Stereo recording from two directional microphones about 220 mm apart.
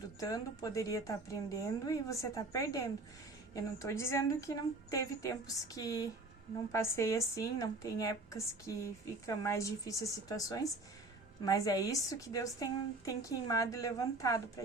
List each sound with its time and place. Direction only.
0.2 s a woman's voice: 15° left (ahead or behind)